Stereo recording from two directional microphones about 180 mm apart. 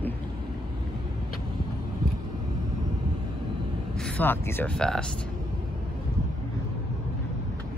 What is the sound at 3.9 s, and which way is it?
Speech, 5° left (ahead or behind).